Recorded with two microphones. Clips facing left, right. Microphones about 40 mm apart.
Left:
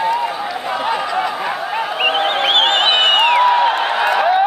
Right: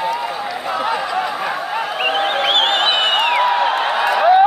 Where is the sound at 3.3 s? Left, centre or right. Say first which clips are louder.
Left 3 dB; centre.